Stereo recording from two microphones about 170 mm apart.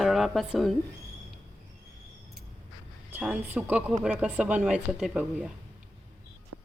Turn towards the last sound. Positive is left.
turn(degrees=-5)  # may be behind; listen again after turning